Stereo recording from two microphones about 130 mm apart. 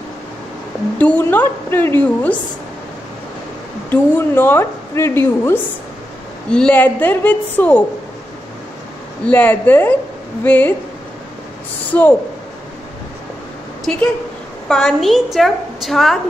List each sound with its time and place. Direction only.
0.9 s a woman's voice: 10° left (ahead or behind)
3.9 s a woman's voice: 15° left (ahead or behind)
9.2 s a woman's voice: 15° left (ahead or behind)
11.9 s a woman's voice: 15° left (ahead or behind)
14.7 s a woman's voice: 5° left (ahead or behind)